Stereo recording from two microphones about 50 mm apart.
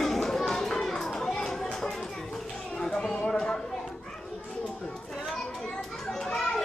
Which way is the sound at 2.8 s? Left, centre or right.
Centre.